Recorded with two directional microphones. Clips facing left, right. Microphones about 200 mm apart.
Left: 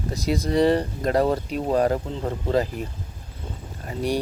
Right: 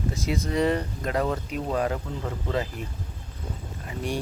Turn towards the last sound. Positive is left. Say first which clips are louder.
# left 5 dB
turn(degrees=35)  # may be behind; listen again after turning